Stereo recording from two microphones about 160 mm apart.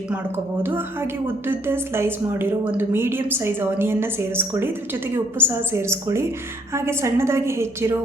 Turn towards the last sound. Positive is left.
turn(degrees=-15)  # may be behind; listen again after turning